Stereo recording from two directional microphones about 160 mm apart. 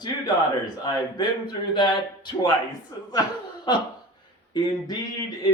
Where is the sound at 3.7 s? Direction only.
30° left (ahead or behind).